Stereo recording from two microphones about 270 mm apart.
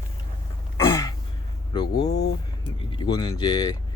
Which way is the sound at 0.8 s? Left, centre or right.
Centre.